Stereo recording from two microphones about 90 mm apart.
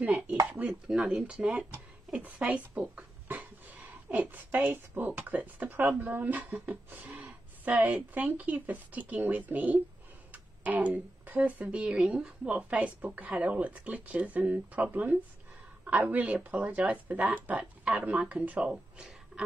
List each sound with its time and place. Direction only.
0.0 s chopping: 15° right (ahead or behind)
0.5 s dishes: 15° right (ahead or behind)
0.8 s speech: 10° right (ahead or behind)